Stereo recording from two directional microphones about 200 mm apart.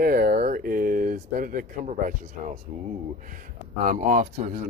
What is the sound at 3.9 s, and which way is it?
Speech, 40° right (ahead or behind).